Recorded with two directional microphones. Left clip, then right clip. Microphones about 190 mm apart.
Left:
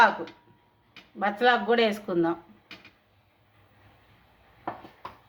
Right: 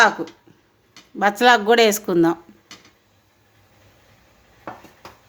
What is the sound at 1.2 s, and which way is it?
Speech, 70° right (ahead or behind).